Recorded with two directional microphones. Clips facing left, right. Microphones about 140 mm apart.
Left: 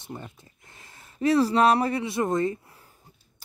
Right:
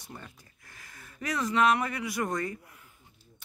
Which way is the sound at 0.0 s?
25° left (ahead or behind).